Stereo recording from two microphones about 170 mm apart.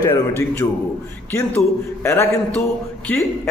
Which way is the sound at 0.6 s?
20° left (ahead or behind).